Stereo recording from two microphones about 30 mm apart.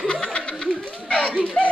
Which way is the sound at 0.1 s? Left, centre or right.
Left.